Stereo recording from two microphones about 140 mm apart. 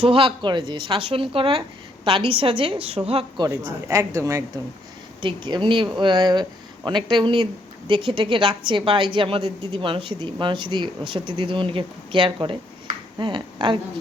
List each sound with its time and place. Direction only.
0.0 s speech: 40° right (ahead or behind)
3.7 s speech: 20° right (ahead or behind)
5.2 s speech: 35° right (ahead or behind)